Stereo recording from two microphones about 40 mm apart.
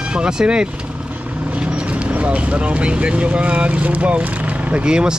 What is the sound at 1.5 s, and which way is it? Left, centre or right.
Speech, right.